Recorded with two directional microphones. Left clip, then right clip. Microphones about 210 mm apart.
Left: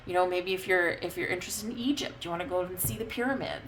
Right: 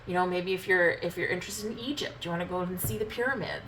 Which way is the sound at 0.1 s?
50° left (ahead or behind).